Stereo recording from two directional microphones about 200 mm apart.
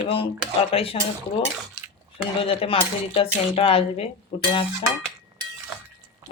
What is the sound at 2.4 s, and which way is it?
Cutlery, 30° left (ahead or behind).